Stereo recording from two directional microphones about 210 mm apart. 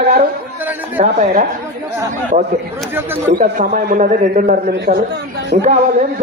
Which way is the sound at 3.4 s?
40° right (ahead or behind).